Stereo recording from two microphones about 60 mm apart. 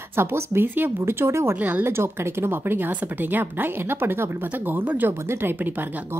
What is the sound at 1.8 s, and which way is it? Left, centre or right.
Speech, right.